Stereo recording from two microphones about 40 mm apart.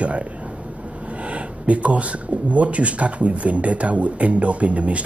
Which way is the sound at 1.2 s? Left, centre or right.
Right.